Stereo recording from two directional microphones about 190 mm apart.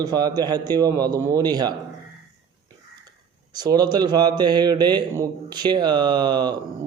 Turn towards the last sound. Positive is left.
turn(degrees=-20)  # may be behind; listen again after turning